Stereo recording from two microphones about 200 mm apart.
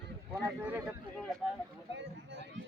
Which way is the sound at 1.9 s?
60° right (ahead or behind).